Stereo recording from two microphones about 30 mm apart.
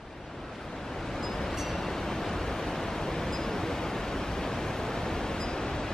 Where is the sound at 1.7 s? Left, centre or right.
Centre.